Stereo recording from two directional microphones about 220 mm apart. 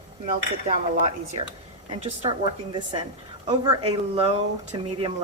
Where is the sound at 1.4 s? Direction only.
25° right (ahead or behind).